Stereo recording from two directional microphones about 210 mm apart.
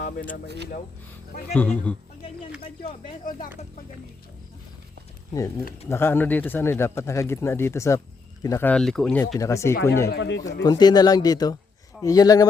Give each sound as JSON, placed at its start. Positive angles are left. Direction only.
{"t": 0.0, "sound": "speech", "side_deg": 40}
{"t": 0.4, "sound": "speech", "side_deg": -55}
{"t": 1.5, "sound": "speech", "side_deg": 5}
{"t": 3.2, "sound": "speech", "side_deg": 40}
{"t": 5.9, "sound": "speech", "side_deg": 10}
{"t": 9.4, "sound": "speech", "side_deg": 15}
{"t": 10.1, "sound": "speech", "side_deg": 55}
{"t": 10.6, "sound": "speech", "side_deg": 20}